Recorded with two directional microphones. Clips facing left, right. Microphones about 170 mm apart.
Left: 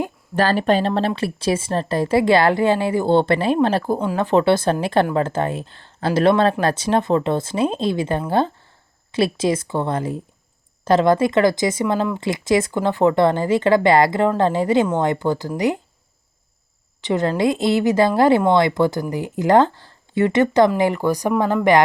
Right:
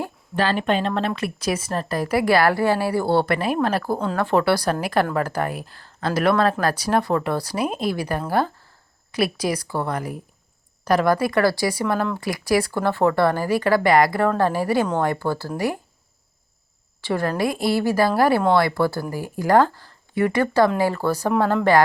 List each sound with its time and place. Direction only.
0.3 s a woman's voice: 40° left (ahead or behind)
3.9 s a woman's voice: 10° left (ahead or behind)
17.0 s a woman's voice: 20° left (ahead or behind)